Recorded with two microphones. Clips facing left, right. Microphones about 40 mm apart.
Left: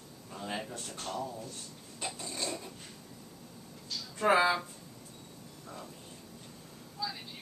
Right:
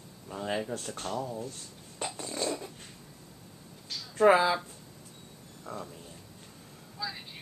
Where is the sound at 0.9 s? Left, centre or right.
Right.